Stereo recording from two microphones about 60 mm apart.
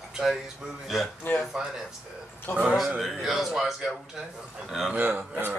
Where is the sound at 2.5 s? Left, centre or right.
Left.